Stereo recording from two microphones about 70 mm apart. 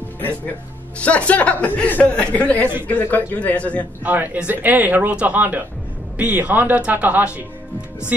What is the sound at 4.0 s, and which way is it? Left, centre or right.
Speech, right.